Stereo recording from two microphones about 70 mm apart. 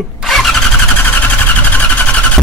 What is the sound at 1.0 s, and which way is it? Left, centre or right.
Vehicle, left.